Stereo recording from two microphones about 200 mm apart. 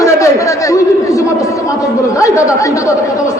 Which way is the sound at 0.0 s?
15° left (ahead or behind).